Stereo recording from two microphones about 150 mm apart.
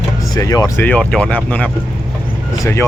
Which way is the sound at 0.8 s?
10° left (ahead or behind).